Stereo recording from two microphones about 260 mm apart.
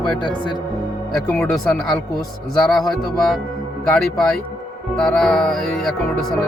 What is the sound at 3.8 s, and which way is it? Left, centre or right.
Speech, centre.